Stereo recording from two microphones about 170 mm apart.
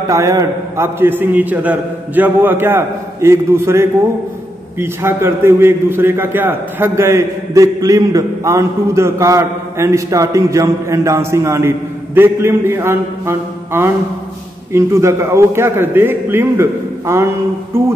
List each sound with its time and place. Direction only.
0.1 s a man's voice: 20° right (ahead or behind)